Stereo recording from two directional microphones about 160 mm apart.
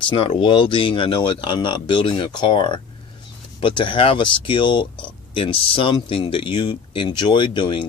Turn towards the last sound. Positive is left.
turn(degrees=30)  # may be behind; listen again after turning